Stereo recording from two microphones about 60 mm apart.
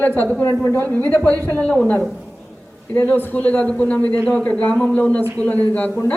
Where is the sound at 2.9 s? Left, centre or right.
Left.